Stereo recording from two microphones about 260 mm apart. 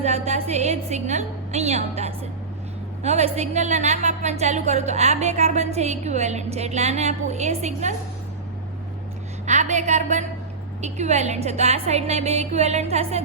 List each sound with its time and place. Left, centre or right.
0.0 s a woman's voice: right
9.5 s a woman's voice: right